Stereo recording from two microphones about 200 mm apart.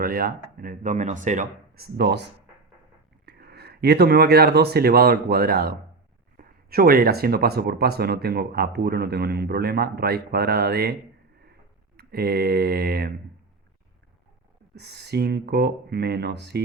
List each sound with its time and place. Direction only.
0.0 s speech: 45° right (ahead or behind)
3.2 s speech: 50° right (ahead or behind)
11.9 s speech: 50° right (ahead or behind)
14.8 s speech: 55° right (ahead or behind)